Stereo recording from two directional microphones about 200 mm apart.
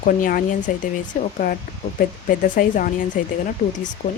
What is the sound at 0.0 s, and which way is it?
Speech, 40° left (ahead or behind).